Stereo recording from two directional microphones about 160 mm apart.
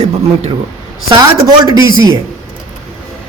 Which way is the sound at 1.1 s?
25° right (ahead or behind).